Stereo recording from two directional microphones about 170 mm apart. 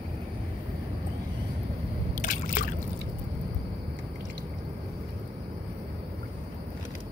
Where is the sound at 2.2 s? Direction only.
50° left (ahead or behind).